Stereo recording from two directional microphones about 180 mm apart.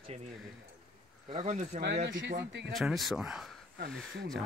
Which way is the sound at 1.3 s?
35° right (ahead or behind).